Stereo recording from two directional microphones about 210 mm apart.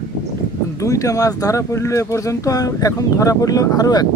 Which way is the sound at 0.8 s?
15° left (ahead or behind).